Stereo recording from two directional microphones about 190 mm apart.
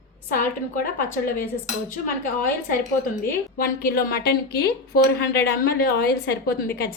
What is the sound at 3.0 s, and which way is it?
A woman's voice, 50° left (ahead or behind).